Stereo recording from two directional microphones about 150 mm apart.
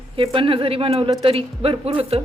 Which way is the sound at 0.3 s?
35° right (ahead or behind).